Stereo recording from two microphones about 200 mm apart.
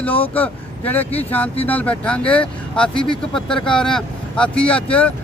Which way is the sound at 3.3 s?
5° left (ahead or behind).